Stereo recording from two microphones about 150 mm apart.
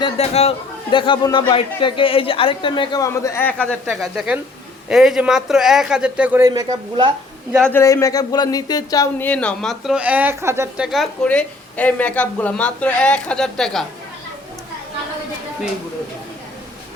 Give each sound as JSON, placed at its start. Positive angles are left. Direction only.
{"t": 0.0, "sound": "a man's voice", "side_deg": 45}
{"t": 4.0, "sound": "a man's voice", "side_deg": -5}
{"t": 6.4, "sound": "speech", "side_deg": -25}
{"t": 7.6, "sound": "speech", "side_deg": 15}
{"t": 9.1, "sound": "a man's voice", "side_deg": 10}
{"t": 10.8, "sound": "a woman's voice", "side_deg": 0}